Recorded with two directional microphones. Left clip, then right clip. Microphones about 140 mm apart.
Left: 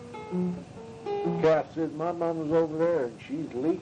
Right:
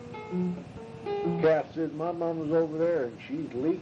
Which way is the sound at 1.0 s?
30° right (ahead or behind).